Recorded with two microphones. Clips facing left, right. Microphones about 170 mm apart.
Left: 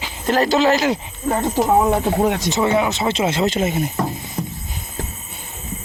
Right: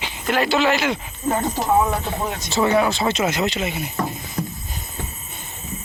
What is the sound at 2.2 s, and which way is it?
Speech, 90° left.